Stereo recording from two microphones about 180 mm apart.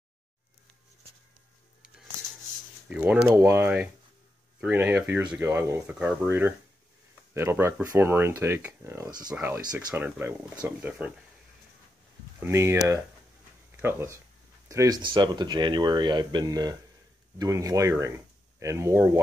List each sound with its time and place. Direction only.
2.9 s speech: 5° right (ahead or behind); by 9.3 s 20° right (ahead or behind)
9.3 s speech: 10° right (ahead or behind)
12.4 s speech: 15° right (ahead or behind)